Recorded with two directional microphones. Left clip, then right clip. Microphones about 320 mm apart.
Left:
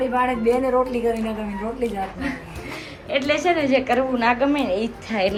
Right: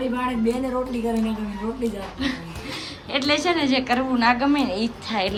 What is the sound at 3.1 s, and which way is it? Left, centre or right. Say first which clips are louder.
A woman's voice: left 2 dB; centre.